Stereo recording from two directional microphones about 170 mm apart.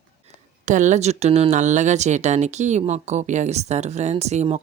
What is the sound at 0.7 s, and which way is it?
Speech, 45° right (ahead or behind).